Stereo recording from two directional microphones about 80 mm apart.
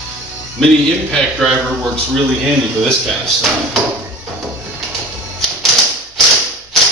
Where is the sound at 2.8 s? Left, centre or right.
Centre.